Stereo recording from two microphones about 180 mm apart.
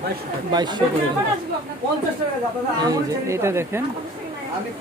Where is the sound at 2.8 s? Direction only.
15° right (ahead or behind).